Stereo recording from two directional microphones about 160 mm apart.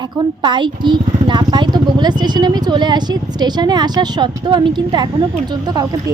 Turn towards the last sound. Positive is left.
turn(degrees=-25)  # may be behind; listen again after turning